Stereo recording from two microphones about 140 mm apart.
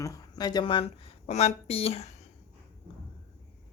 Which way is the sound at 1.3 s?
50° left (ahead or behind).